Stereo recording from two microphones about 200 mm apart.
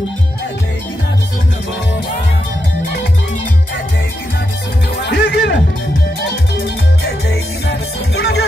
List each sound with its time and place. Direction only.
4.9 s music: 60° left (ahead or behind)
6.6 s music: 55° left (ahead or behind)